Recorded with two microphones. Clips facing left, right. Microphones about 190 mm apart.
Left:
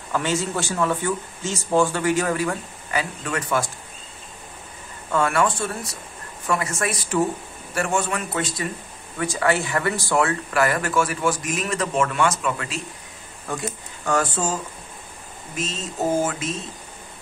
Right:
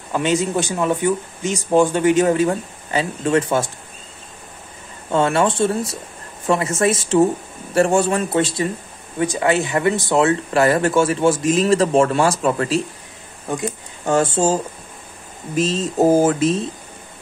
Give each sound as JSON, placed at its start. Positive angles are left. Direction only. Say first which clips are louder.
{"t": 0.1, "sound": "speech", "louder": "right 5 dB", "side_deg": -20}
{"t": 5.1, "sound": "speech", "louder": "right 4 dB", "side_deg": -25}
{"t": 14.0, "sound": "speech", "louder": "right 6 dB", "side_deg": -25}